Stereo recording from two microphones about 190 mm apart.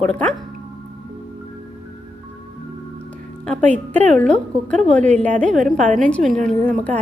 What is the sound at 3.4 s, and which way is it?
A woman's voice, 5° left (ahead or behind).